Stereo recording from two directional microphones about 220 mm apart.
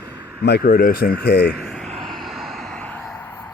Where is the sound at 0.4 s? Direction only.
45° left (ahead or behind).